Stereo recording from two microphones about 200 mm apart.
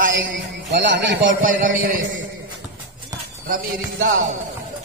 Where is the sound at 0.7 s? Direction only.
60° right (ahead or behind).